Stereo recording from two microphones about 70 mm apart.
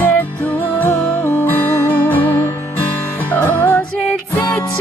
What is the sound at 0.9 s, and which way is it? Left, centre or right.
Music, left.